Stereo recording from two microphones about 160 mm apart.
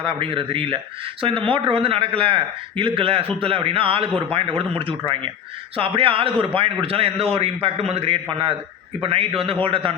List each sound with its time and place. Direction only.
0.0 s a man's voice: 30° right (ahead or behind)